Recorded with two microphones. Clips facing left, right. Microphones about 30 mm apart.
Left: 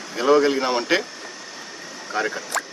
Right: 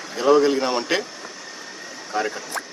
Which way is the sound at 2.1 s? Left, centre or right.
Centre.